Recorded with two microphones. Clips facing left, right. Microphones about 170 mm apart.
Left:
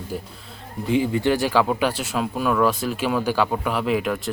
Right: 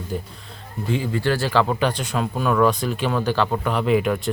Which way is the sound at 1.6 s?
5° left (ahead or behind).